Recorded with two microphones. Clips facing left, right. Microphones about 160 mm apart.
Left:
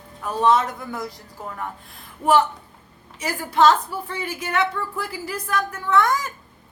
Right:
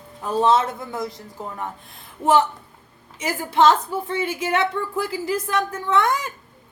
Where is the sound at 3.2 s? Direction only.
25° right (ahead or behind).